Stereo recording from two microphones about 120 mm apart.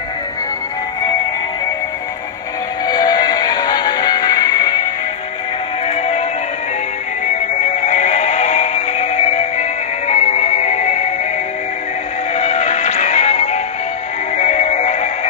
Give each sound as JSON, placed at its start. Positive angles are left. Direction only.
{"t": 2.9, "sound": "music", "side_deg": 35}
{"t": 5.9, "sound": "music", "side_deg": 60}
{"t": 7.8, "sound": "music", "side_deg": 65}
{"t": 12.4, "sound": "music", "side_deg": 65}